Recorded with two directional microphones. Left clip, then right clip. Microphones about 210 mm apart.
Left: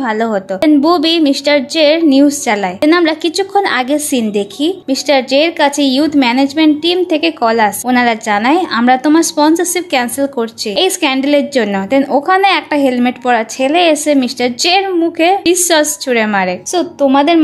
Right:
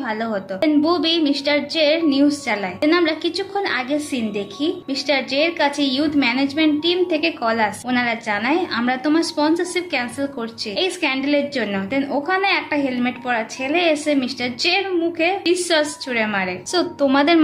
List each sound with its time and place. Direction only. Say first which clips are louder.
0.0 s a woman's voice: left 9 dB; 40° left (ahead or behind)
16.7 s a woman's voice: left 6 dB; 25° left (ahead or behind)